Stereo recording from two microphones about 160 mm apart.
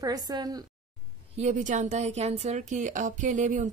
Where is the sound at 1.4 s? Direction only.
50° right (ahead or behind).